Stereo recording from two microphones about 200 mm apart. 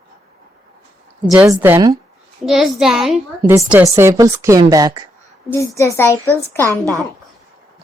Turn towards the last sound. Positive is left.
turn(degrees=-15)  # may be behind; listen again after turning